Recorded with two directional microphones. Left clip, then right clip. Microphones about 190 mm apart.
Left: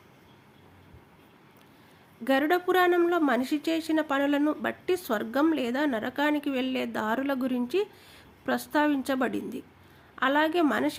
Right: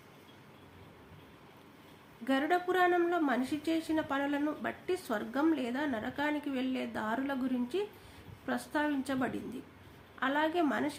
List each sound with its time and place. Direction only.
2.2 s a woman's voice: 45° left (ahead or behind)